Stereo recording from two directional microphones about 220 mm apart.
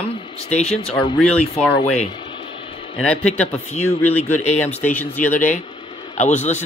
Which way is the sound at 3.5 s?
30° left (ahead or behind).